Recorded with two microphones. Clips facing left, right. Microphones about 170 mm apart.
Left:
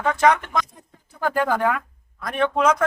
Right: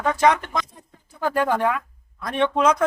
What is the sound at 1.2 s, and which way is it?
Speech, 20° right (ahead or behind).